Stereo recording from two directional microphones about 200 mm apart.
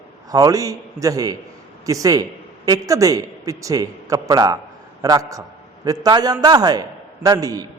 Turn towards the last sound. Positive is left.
turn(degrees=-15)  # may be behind; listen again after turning